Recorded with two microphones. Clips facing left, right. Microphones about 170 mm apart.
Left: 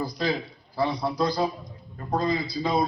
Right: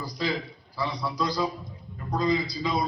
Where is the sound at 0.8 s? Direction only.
55° left (ahead or behind).